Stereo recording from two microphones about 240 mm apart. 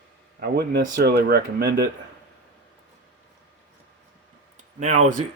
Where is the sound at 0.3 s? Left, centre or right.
Right.